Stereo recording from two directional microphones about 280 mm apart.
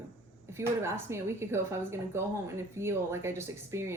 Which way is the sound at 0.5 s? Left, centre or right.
Centre.